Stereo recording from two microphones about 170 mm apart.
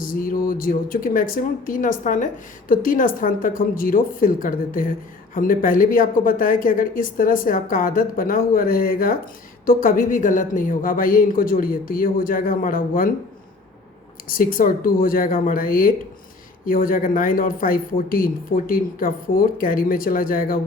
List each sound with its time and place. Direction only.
0.0 s speech: 55° left (ahead or behind)
14.3 s speech: 55° left (ahead or behind)